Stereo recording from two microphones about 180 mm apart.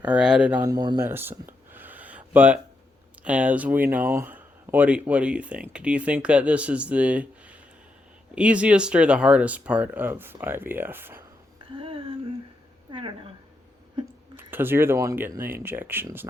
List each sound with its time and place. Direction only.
0.0 s speech: 5° right (ahead or behind)
0.6 s speech: 20° right (ahead or behind)
1.0 s a sound: 10° right (ahead or behind)
3.2 s speech: 5° right (ahead or behind)
11.7 s speech: 30° right (ahead or behind)
14.3 s speech: 10° right (ahead or behind)